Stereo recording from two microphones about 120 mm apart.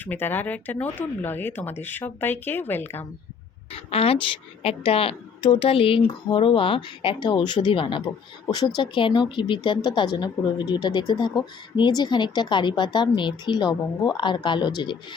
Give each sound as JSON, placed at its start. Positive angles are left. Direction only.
{"t": 0.0, "sound": "speech", "side_deg": 15}
{"t": 3.7, "sound": "speech", "side_deg": 50}
{"t": 8.4, "sound": "speech", "side_deg": 35}